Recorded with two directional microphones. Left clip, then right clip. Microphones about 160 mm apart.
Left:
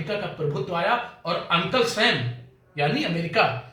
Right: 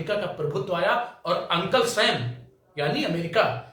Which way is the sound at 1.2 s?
20° right (ahead or behind).